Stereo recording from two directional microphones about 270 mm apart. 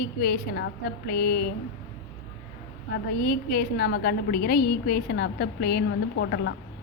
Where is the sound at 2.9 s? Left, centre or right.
Left.